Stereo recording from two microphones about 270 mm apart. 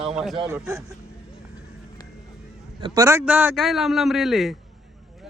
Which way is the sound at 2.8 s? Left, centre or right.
Centre.